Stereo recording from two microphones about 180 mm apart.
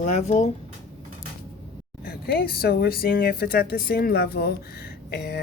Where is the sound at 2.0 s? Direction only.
55° left (ahead or behind).